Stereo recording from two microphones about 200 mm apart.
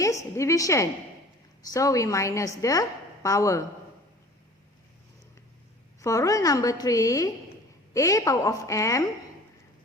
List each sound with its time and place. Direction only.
0.0 s a woman's voice: 15° left (ahead or behind)
6.0 s a woman's voice: 15° left (ahead or behind)